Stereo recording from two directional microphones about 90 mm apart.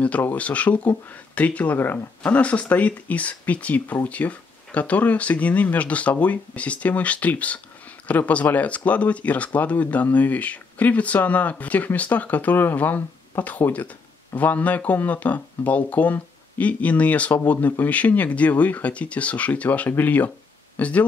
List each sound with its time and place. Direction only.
0.0 s speech: 15° left (ahead or behind)